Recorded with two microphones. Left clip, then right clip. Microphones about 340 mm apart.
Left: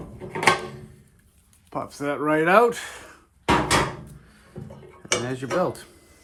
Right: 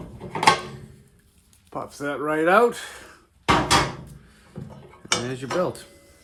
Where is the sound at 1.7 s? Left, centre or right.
Left.